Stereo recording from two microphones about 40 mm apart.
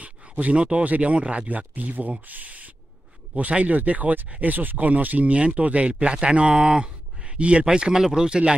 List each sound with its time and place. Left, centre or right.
0.0 s a sound: right
0.8 s speech: right
1.1 s speech: right
1.8 s speech: right